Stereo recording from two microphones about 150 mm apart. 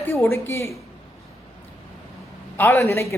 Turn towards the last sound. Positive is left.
turn(degrees=15)  # may be behind; listen again after turning